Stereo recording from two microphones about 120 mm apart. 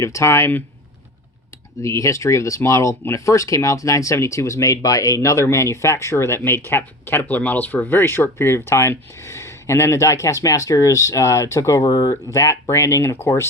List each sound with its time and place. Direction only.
0.0 s speech: 25° left (ahead or behind)
1.8 s speech: 25° left (ahead or behind)